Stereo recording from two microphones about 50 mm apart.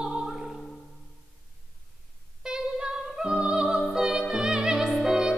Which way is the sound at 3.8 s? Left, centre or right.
Centre.